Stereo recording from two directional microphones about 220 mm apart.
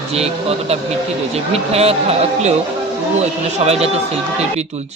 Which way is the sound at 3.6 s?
30° right (ahead or behind).